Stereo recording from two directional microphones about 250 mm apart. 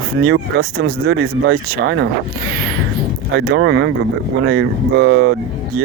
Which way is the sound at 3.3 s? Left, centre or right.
Right.